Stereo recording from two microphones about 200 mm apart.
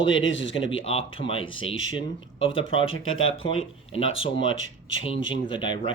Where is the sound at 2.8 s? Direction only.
80° left.